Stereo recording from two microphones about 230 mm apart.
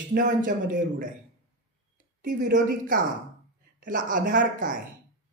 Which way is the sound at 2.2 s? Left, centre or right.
Right.